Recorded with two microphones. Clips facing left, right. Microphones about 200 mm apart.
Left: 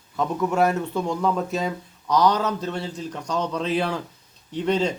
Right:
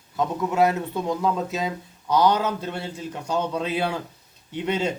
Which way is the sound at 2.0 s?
30° right (ahead or behind).